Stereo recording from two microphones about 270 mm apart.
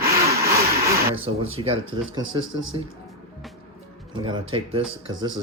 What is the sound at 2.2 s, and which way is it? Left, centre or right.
Speech, right.